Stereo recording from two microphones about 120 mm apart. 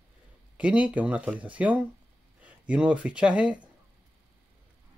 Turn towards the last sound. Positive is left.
turn(degrees=-10)  # may be behind; listen again after turning